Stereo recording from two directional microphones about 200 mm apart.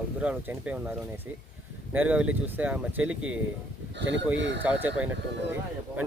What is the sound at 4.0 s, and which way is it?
Speech, 65° right (ahead or behind).